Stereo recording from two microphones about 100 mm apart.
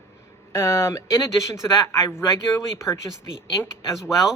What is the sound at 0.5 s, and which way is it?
Speech, 25° left (ahead or behind).